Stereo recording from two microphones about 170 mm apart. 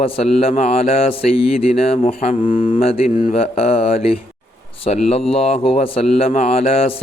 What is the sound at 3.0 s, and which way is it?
Speech, 50° left (ahead or behind).